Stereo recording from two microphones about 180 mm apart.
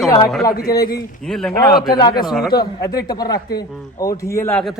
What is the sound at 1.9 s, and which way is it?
Speech, 25° left (ahead or behind).